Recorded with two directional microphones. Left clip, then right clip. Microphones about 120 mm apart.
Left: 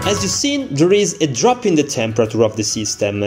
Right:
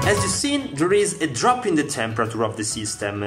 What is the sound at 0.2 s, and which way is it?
Speech, 15° left (ahead or behind).